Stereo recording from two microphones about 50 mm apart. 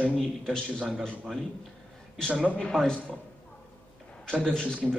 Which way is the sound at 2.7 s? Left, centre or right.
Centre.